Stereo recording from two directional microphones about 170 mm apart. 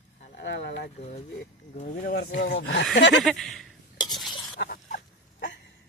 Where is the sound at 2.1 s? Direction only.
75° left (ahead or behind); by 2.8 s 90° left.